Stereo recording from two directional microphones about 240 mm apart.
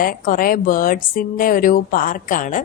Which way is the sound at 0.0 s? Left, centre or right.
Left.